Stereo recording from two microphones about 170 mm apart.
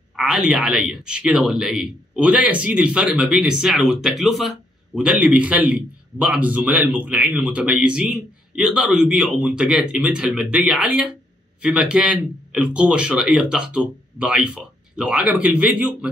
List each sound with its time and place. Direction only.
0.1 s a man's voice: 5° right (ahead or behind)